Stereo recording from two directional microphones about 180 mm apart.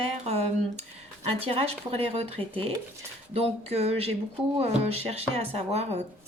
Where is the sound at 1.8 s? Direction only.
35° right (ahead or behind).